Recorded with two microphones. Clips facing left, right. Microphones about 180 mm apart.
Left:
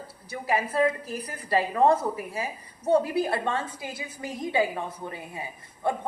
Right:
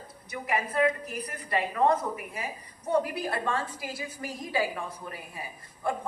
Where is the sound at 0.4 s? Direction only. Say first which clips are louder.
Left 2 dB; 30° left (ahead or behind).